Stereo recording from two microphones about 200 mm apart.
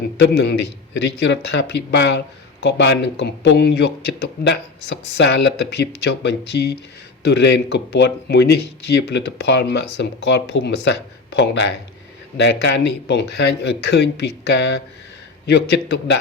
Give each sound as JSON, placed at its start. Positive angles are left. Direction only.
{"t": 0.2, "sound": "a man's voice", "side_deg": 55}